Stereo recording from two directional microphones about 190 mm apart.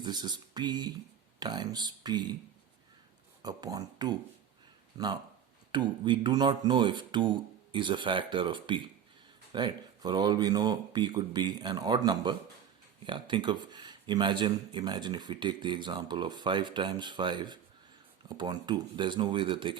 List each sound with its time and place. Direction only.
0.0 s speech: 20° right (ahead or behind)
3.4 s speech: 20° right (ahead or behind)